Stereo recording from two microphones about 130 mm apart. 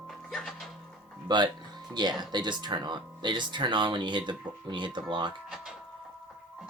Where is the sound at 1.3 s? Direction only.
35° right (ahead or behind).